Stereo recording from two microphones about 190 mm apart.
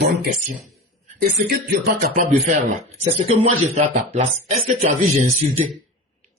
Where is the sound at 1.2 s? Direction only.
50° right (ahead or behind).